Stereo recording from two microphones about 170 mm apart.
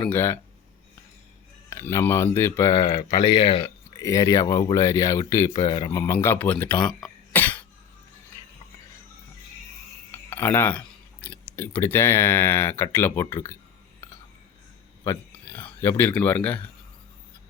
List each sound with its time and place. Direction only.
0.0 s speech: 10° left (ahead or behind)
1.7 s speech: 15° left (ahead or behind); by 3.7 s 30° left (ahead or behind)
3.9 s speech: 20° left (ahead or behind)
6.0 s speech: 15° left (ahead or behind)
10.1 s speech: 10° left (ahead or behind)
15.6 s speech: 15° left (ahead or behind)